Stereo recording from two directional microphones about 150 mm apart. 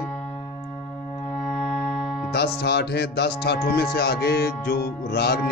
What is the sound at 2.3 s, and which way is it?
Speech, 90° left.